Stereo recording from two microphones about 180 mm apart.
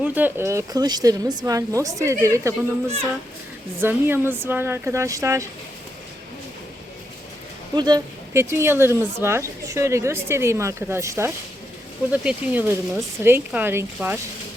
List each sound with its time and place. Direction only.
0.0 s speech: 10° right (ahead or behind)
7.8 s speech: 20° right (ahead or behind)